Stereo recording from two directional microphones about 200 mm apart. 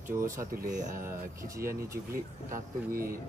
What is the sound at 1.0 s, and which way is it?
Speech, 15° right (ahead or behind).